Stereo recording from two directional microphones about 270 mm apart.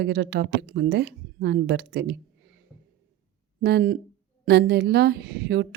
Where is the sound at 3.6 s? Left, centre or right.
Right.